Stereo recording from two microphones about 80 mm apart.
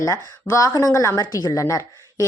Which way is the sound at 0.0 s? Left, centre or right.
Left.